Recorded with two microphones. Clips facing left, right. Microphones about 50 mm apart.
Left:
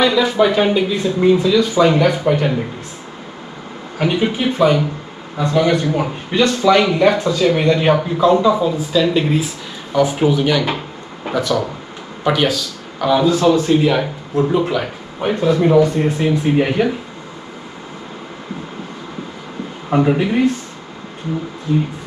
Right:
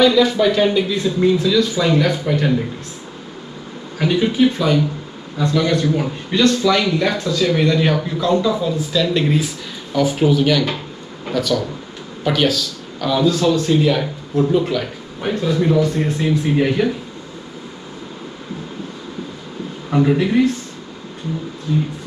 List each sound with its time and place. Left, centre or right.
0.0 s speech: left
4.0 s speech: left
19.9 s speech: left
21.7 s speech: left